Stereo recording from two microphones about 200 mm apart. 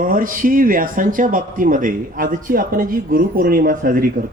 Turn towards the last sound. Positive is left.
turn(degrees=-45)  # may be behind; listen again after turning